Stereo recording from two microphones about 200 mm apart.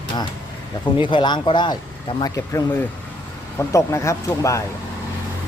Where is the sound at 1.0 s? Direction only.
25° left (ahead or behind).